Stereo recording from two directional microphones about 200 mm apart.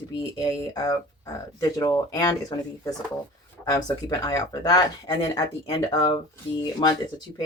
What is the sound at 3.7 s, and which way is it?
Speech, 20° left (ahead or behind).